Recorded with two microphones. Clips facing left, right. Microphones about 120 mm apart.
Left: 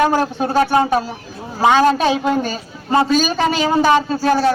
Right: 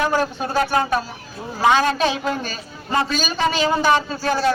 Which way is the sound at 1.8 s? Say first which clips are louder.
Left 5 dB; 35° left (ahead or behind).